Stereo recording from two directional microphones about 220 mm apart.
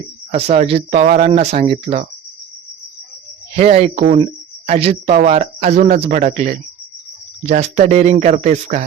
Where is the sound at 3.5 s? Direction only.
30° right (ahead or behind).